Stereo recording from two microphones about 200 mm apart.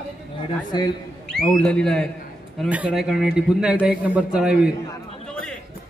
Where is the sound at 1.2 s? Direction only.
5° left (ahead or behind).